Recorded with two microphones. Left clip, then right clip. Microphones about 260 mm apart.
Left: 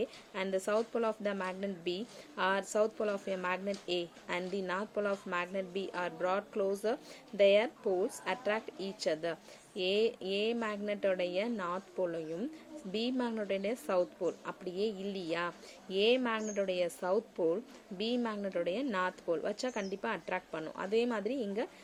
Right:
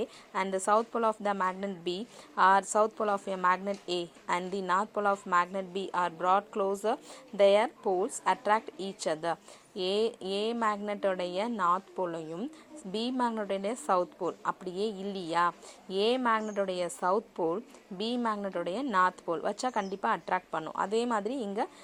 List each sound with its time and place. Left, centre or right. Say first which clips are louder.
0.0 s a woman's voice: right 4 dB; centre